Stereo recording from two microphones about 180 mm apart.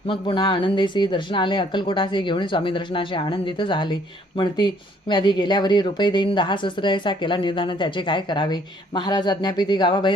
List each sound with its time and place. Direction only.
0.1 s speech: 25° left (ahead or behind)